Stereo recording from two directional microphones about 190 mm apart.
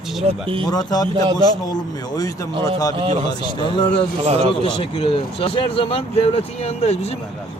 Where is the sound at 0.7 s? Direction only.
20° left (ahead or behind).